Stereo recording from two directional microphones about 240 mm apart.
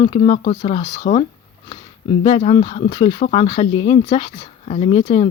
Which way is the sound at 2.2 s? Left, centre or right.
Left.